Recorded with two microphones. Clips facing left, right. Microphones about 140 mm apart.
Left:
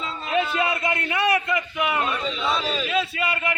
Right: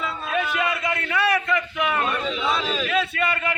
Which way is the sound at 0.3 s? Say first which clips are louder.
Left 2 dB; 30° left (ahead or behind).